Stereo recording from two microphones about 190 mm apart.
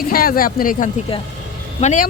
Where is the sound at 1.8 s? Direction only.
35° left (ahead or behind).